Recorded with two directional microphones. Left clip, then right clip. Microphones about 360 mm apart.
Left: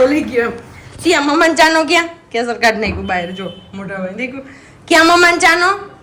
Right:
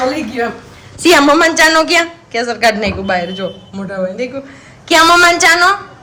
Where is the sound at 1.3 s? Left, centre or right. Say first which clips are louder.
Right 2 dB; centre.